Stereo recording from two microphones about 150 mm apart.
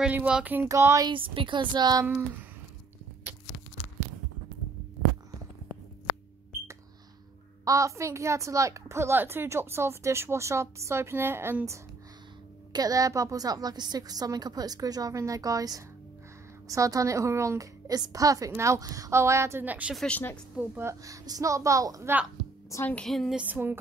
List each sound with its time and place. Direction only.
0.0 s speech: 10° right (ahead or behind)
1.1 s a woman's voice: 35° right (ahead or behind)
7.6 s a woman's voice: 20° right (ahead or behind); by 20.1 s 5° right (ahead or behind)
20.1 s speech: 10° left (ahead or behind)
20.5 s speech: 10° right (ahead or behind)
21.0 s a woman's voice: 20° right (ahead or behind)
22.7 s a woman's voice: 20° left (ahead or behind)
22.9 s a woman's voice: centre (ahead or behind)
23.4 s speech: 15° right (ahead or behind)